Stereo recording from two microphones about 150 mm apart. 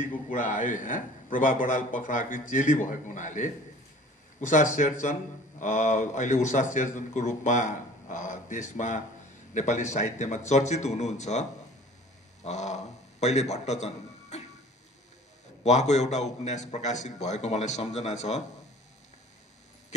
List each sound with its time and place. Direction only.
0.0 s a man's voice: 60° left (ahead or behind)
12.4 s a man's voice: 50° left (ahead or behind)
15.6 s a man's voice: 50° left (ahead or behind)